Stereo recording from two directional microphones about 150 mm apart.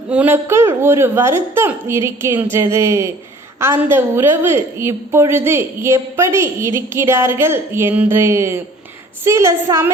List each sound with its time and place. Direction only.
0.1 s a woman's voice: 10° right (ahead or behind)